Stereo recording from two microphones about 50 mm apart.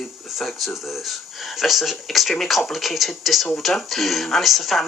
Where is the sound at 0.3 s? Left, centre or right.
Centre.